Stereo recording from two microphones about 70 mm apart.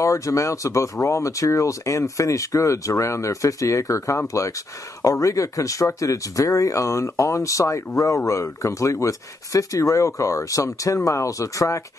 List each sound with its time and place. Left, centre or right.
0.0 s speech: left